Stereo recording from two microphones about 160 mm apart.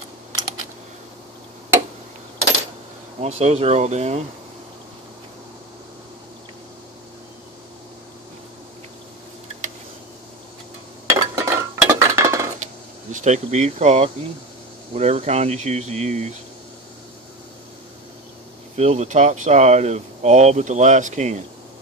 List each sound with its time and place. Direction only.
3.2 s speech: 40° right (ahead or behind)
11.1 s chink: 20° right (ahead or behind)
13.1 s speech: 50° right (ahead or behind)
18.8 s speech: 45° right (ahead or behind)